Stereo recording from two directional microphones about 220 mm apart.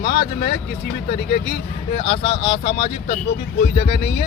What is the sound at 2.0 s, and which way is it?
Speech, 25° left (ahead or behind).